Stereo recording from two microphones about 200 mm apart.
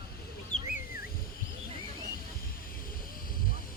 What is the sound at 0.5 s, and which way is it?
Bird, 45° left (ahead or behind).